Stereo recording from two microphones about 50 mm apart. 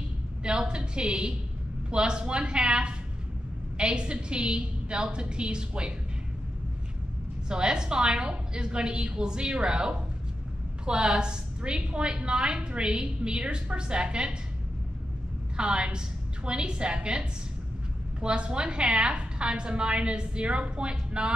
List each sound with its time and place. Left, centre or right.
0.4 s a woman's voice: centre
7.4 s a woman's voice: centre
15.5 s a woman's voice: centre